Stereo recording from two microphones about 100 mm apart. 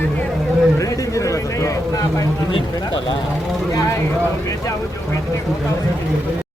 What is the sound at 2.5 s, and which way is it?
Speech, 60° left (ahead or behind).